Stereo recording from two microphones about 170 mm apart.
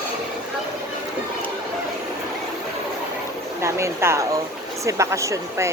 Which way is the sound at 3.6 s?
15° right (ahead or behind).